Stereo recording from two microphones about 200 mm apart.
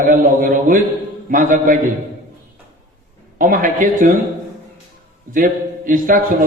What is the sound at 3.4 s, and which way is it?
Speech, 40° right (ahead or behind).